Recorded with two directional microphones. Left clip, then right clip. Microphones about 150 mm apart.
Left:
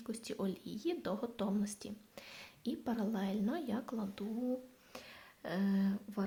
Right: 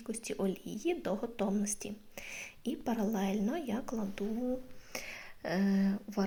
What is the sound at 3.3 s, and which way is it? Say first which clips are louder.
Speech: right 3 dB; centre (ahead or behind).